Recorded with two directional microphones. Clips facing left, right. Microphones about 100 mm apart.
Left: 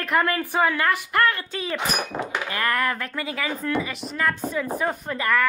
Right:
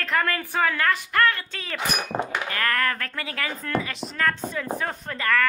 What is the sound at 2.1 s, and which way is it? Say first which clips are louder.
Speech: right 2 dB; 35° right (ahead or behind).